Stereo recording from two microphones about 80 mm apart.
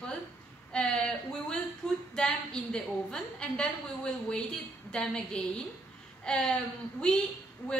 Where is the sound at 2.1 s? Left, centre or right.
Centre.